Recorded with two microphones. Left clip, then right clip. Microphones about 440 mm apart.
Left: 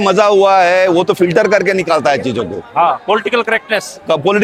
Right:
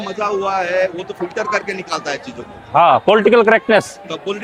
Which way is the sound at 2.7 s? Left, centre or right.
Right.